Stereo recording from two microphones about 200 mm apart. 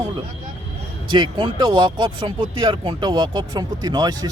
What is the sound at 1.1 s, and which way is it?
Speech, 20° right (ahead or behind).